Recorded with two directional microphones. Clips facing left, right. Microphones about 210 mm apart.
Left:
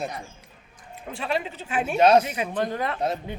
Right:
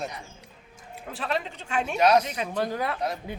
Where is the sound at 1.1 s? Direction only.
Centre (ahead or behind).